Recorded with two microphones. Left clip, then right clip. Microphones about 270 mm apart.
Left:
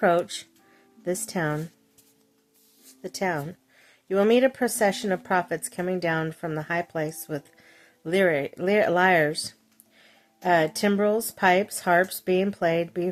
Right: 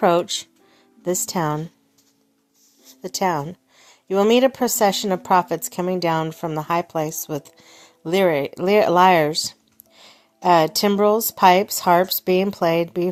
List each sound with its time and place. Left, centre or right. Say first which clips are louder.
0.0 s speech: right 4 dB; centre
2.8 s speech: right 6 dB; centre